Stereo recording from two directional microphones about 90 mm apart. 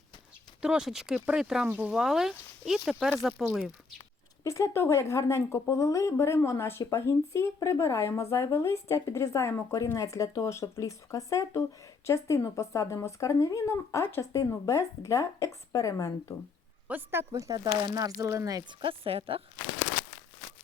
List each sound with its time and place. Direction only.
0.6 s speech: 5° right (ahead or behind)
1.6 s speech: 15° right (ahead or behind); by 3.4 s centre (ahead or behind)
4.4 s speech: 35° left (ahead or behind)
16.9 s speech: 25° right (ahead or behind)
17.3 s speech: 45° right (ahead or behind)
18.7 s a woman's voice: 70° right (ahead or behind); by 19.4 s 90° right